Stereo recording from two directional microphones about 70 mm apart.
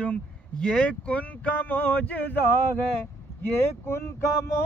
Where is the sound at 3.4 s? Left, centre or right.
Left.